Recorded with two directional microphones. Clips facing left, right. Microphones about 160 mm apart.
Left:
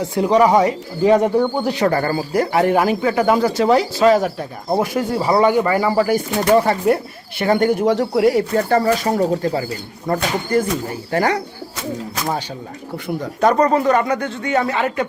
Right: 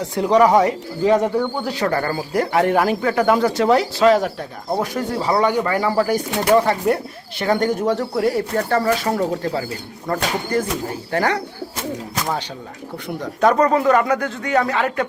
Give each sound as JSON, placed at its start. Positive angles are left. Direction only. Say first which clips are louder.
{"t": 0.1, "sound": "speech", "louder": "even", "side_deg": 5}
{"t": 1.0, "sound": "speech", "louder": "left 3 dB", "side_deg": 10}
{"t": 1.4, "sound": "speech", "louder": "left 4 dB", "side_deg": 25}
{"t": 1.9, "sound": "speech", "louder": "left 2 dB", "side_deg": 5}
{"t": 13.1, "sound": "speech", "louder": "left 1 dB", "side_deg": 0}